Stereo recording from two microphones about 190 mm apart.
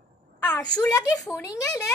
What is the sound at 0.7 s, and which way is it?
Speech, 20° left (ahead or behind).